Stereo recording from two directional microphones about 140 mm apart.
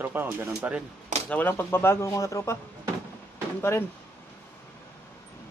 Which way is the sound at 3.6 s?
15° left (ahead or behind).